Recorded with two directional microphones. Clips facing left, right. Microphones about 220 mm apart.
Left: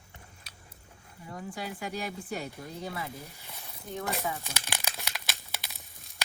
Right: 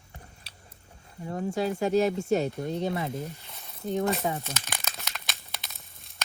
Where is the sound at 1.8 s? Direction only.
25° right (ahead or behind).